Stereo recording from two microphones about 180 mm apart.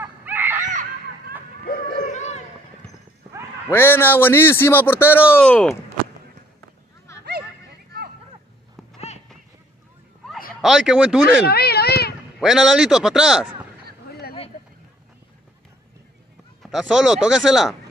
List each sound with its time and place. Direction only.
0.0 s screaming: 10° right (ahead or behind)
0.7 s a sound: 45° right (ahead or behind)
1.7 s a sound: 45° left (ahead or behind)
3.7 s a man's voice: 10° left (ahead or behind)
10.6 s speech: centre (ahead or behind)
11.2 s cat: 60° left (ahead or behind)
12.4 s speech: centre (ahead or behind)
16.6 s speech: centre (ahead or behind)